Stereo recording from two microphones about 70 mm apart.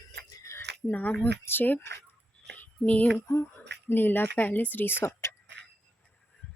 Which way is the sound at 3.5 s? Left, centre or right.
Left.